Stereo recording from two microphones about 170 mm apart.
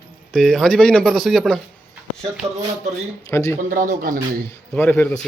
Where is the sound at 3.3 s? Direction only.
20° left (ahead or behind).